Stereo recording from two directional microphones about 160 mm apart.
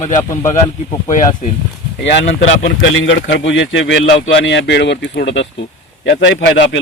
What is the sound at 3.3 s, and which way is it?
Speech, 90° left.